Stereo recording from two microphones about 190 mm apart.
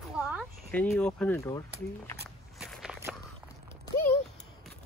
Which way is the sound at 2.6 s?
5° right (ahead or behind).